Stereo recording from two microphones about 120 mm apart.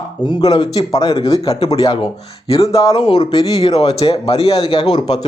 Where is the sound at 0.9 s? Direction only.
50° left (ahead or behind); by 3.6 s 35° left (ahead or behind).